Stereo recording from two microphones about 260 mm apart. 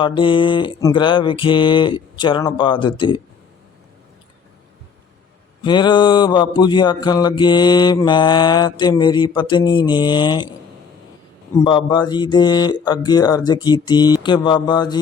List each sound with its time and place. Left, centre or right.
0.0 s mantra: centre
5.6 s speech: centre
11.5 s speech: centre